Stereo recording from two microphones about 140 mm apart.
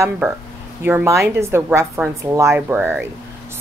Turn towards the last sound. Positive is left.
turn(degrees=-15)  # may be behind; listen again after turning